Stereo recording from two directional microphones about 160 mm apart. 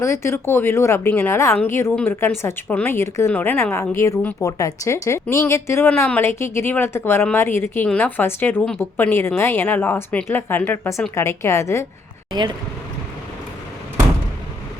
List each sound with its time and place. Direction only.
0.0 s a woman's voice: 15° left (ahead or behind)
12.3 s speech: 25° right (ahead or behind)